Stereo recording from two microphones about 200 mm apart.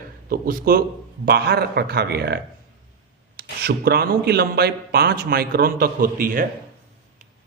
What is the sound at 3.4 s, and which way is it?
A man's voice, 50° right (ahead or behind).